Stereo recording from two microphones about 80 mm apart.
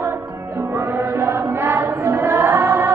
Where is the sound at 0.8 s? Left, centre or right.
Right.